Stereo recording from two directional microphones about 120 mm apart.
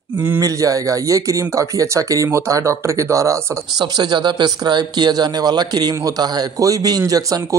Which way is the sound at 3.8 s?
40° right (ahead or behind).